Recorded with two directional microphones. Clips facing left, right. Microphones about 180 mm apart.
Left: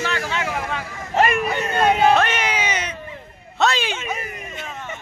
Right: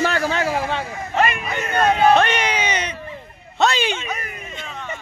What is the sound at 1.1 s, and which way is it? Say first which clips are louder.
Speech: left 3 dB; 35° left (ahead or behind).